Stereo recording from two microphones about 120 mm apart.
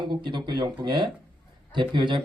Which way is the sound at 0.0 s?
40° right (ahead or behind).